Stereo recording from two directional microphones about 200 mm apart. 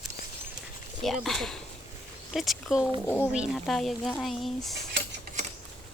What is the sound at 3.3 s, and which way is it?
Speech, centre (ahead or behind).